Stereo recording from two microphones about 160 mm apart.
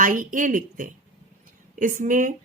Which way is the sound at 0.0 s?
55° right (ahead or behind).